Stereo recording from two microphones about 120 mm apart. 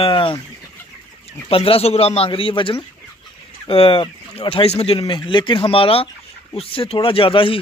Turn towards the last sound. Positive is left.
turn(degrees=45)  # may be behind; listen again after turning